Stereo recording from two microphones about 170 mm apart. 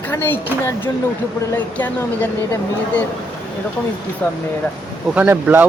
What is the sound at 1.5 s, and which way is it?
A woman's voice, 10° left (ahead or behind).